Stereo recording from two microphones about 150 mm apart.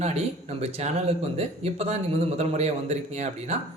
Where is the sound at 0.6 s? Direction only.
45° right (ahead or behind).